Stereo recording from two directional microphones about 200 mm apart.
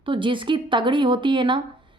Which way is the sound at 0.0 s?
25° right (ahead or behind).